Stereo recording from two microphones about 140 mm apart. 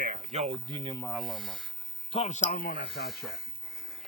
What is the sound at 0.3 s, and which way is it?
Speech, 55° right (ahead or behind).